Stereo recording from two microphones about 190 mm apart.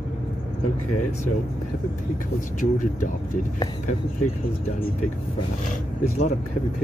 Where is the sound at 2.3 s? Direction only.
45° left (ahead or behind).